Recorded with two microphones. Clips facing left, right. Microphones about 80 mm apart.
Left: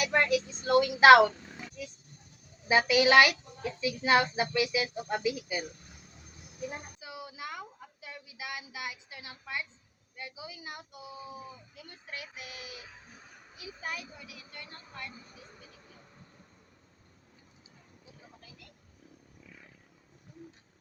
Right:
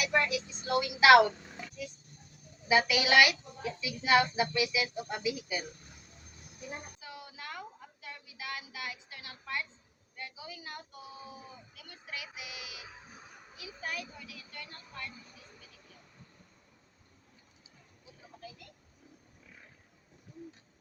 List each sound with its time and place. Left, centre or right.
0.0 s speech: left
2.6 s speech: left
6.7 s a sound: centre
8.0 s a woman's voice: centre
11.7 s speech: left
13.6 s speech: centre